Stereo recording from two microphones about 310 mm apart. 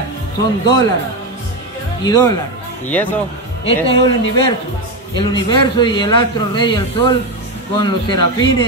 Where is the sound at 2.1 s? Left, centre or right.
Centre.